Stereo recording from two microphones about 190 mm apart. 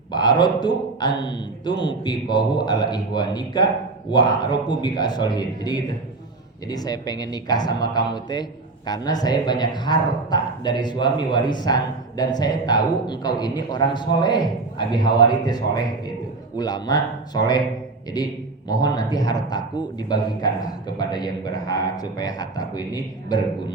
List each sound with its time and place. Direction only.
0.1 s a man's voice: 25° left (ahead or behind)
18.7 s a man's voice: 20° left (ahead or behind)